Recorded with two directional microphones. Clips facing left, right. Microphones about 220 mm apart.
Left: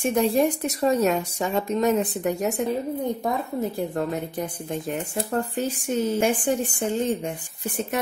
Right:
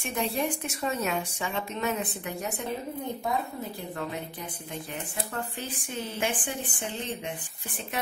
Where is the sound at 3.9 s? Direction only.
45° left (ahead or behind).